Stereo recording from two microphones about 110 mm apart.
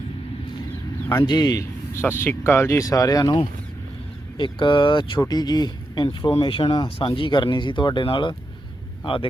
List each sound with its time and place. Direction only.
1.1 s speech: 40° left (ahead or behind)
2.0 s speech: 20° left (ahead or behind)
4.4 s speech: 45° left (ahead or behind)